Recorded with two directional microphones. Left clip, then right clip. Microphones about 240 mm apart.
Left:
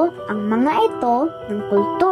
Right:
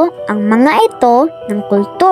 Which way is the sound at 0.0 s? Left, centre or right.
Right.